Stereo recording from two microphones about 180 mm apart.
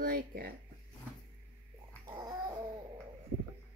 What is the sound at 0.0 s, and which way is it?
Speech, 55° right (ahead or behind).